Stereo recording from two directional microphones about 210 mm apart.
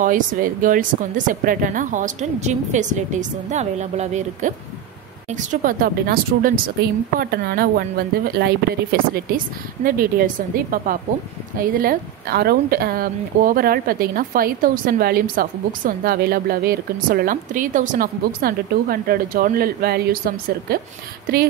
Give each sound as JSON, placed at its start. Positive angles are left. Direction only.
{"t": 0.0, "sound": "a woman's voice", "side_deg": -40}